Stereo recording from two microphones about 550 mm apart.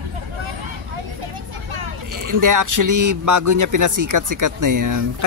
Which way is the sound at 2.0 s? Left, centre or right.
Right.